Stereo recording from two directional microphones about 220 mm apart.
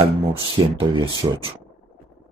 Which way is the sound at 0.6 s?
20° right (ahead or behind).